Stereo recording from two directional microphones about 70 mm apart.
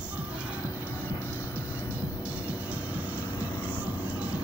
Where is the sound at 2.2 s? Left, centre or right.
Centre.